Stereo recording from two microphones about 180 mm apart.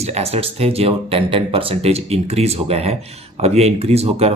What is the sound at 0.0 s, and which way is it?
Speech, 35° right (ahead or behind).